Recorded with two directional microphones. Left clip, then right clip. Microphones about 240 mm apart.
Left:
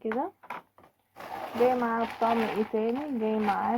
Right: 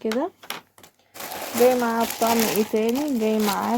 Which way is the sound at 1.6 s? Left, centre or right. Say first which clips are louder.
Right 6 dB; right.